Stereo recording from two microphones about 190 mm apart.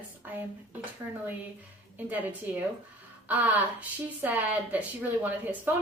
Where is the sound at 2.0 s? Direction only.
10° right (ahead or behind).